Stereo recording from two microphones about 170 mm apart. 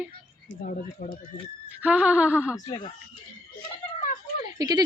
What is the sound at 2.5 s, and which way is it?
Speech, 25° left (ahead or behind).